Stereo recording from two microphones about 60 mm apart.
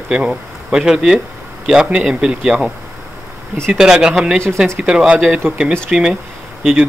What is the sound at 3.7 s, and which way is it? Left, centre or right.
Speech, centre.